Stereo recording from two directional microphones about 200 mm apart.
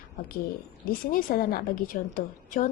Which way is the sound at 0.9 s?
45° left (ahead or behind).